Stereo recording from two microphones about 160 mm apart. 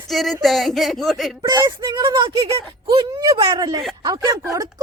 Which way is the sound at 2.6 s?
35° right (ahead or behind).